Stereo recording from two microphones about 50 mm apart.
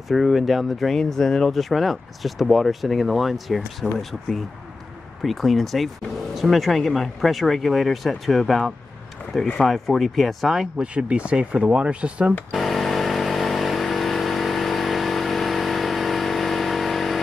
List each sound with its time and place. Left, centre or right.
0.1 s speech: centre
10.8 s speech: right
12.5 s vehicle: centre